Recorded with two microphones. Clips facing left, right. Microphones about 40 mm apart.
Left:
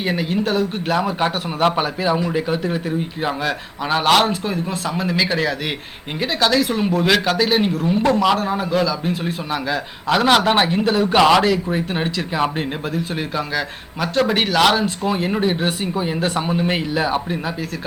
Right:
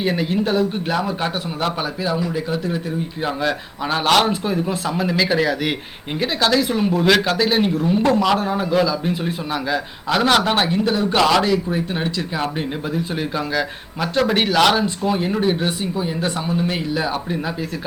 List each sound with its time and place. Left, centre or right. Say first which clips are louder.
0.0 s a man's voice: right 1 dB; centre
1.6 s a man's voice: left 5 dB; left; by 10.5 s centre
10.9 s a man's voice: left 4 dB; left
13.1 s a man's voice: right 1 dB; centre